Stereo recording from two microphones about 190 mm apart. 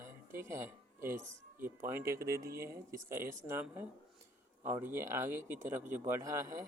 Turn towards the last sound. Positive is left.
turn(degrees=-15)  # may be behind; listen again after turning